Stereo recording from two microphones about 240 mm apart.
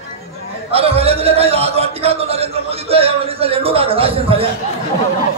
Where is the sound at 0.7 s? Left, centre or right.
Right.